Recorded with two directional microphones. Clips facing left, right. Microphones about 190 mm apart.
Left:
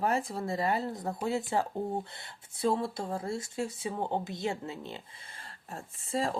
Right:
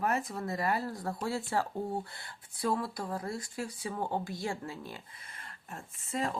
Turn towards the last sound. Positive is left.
turn(degrees=30)  # may be behind; listen again after turning